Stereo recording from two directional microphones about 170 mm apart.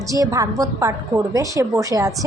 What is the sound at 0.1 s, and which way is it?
A woman's voice, 20° right (ahead or behind).